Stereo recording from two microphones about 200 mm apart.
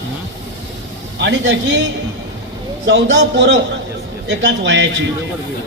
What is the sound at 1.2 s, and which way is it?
Speech, 60° right (ahead or behind).